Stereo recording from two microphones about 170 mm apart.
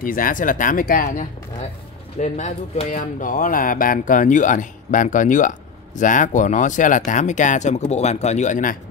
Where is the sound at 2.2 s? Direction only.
45° left (ahead or behind).